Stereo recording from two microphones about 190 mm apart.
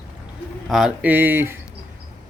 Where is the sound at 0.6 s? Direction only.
Centre (ahead or behind).